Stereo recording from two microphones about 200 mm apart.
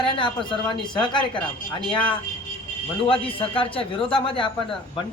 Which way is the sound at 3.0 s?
25° left (ahead or behind).